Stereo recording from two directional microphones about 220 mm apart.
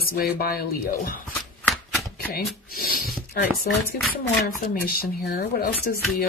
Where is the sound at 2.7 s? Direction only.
40° left (ahead or behind).